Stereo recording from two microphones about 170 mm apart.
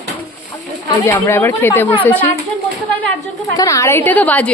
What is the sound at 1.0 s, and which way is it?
A woman's voice, 15° left (ahead or behind).